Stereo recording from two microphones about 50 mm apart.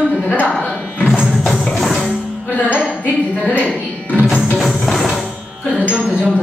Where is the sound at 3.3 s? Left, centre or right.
Left.